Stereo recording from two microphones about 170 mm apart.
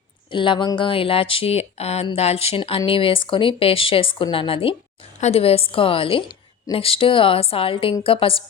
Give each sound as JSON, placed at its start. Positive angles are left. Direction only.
{"t": 0.3, "sound": "speech", "side_deg": 30}